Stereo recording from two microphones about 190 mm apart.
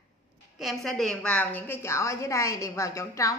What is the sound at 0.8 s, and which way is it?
A woman's voice, centre (ahead or behind).